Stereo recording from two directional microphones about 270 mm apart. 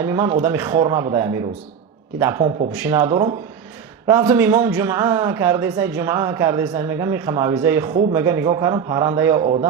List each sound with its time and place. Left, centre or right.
0.0 s a man's voice: centre